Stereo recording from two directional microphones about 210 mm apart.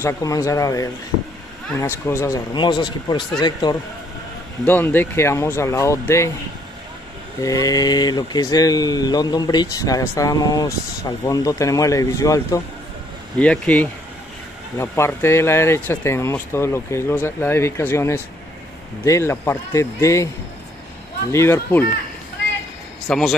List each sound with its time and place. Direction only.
0.0 s speech: 15° left (ahead or behind)
4.6 s speech: 10° left (ahead or behind)
7.4 s speech: 15° left (ahead or behind)
21.3 s speech: 10° left (ahead or behind)
23.0 s speech: centre (ahead or behind)